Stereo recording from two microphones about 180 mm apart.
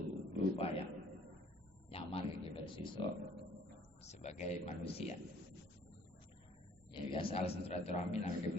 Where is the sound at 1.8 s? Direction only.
30° left (ahead or behind).